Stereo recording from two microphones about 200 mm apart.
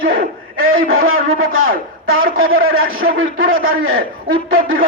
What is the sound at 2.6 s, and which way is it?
Speech, 45° right (ahead or behind).